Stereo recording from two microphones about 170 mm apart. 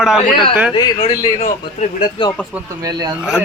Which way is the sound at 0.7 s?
25° left (ahead or behind).